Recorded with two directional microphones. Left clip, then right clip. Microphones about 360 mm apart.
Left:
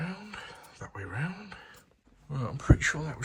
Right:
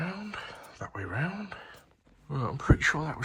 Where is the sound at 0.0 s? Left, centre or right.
Centre.